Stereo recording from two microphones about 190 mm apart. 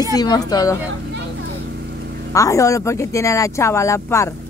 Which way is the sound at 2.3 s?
15° left (ahead or behind).